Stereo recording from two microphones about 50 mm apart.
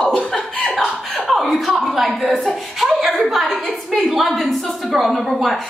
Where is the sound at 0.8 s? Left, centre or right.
Centre.